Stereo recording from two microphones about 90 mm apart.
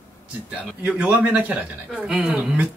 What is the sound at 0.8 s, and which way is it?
Speech, 15° right (ahead or behind).